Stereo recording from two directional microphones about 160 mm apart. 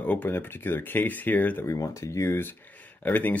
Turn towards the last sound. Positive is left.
turn(degrees=10)  # may be behind; listen again after turning